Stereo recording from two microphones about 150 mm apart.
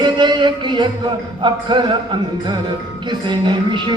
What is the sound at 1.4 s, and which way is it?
Speech, 30° right (ahead or behind).